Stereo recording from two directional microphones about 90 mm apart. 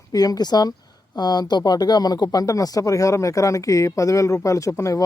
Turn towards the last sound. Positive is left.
turn(degrees=35)  # may be behind; listen again after turning